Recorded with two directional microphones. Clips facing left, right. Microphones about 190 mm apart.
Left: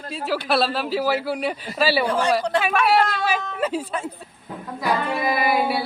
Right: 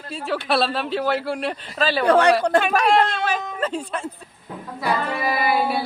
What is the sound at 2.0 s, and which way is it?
Speech, 70° right (ahead or behind).